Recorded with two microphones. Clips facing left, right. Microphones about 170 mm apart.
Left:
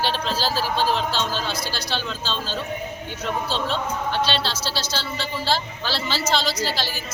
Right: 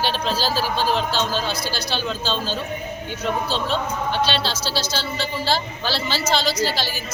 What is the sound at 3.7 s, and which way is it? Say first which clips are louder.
Speech: right 2 dB; 5° right (ahead or behind).